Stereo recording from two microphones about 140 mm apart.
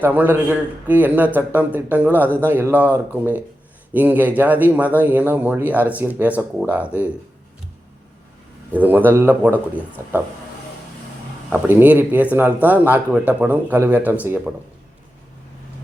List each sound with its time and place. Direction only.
0.0 s speech: 15° right (ahead or behind)
8.7 s speech: 10° right (ahead or behind)
11.7 s speech: 15° right (ahead or behind)